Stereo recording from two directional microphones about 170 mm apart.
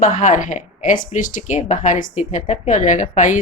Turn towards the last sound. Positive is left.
turn(degrees=50)  # may be behind; listen again after turning